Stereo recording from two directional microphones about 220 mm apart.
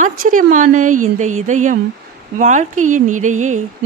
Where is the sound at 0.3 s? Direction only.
35° right (ahead or behind).